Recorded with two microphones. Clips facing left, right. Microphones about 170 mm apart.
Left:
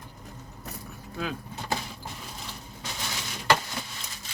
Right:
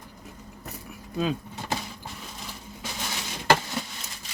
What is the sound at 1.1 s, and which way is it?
Speech, 20° right (ahead or behind).